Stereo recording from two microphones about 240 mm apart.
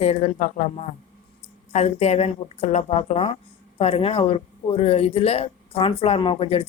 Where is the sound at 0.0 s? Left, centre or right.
Left.